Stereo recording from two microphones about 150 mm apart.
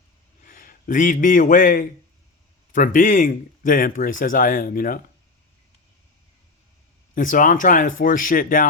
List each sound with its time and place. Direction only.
0.4 s a man's voice: 65° left (ahead or behind)
7.1 s speech: 65° left (ahead or behind)